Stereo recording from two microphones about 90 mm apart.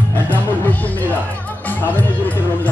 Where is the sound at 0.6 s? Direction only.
20° left (ahead or behind).